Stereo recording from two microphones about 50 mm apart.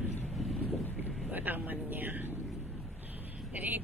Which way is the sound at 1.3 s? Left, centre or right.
Right.